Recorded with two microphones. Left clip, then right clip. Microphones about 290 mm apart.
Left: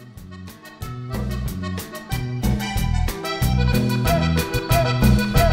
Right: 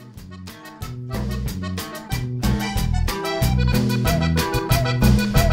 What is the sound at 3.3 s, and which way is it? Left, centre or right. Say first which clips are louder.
Music: left 1 dB; centre.